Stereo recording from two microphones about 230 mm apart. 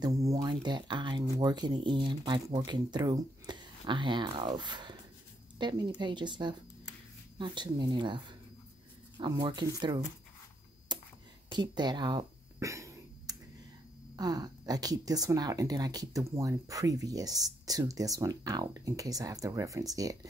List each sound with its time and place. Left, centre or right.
0.0 s speech: centre
10.9 s a sound: centre
11.5 s finger snapping: centre
14.1 s a woman's voice: centre